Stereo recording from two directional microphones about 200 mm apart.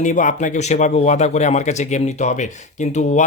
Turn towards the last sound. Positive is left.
turn(degrees=35)  # may be behind; listen again after turning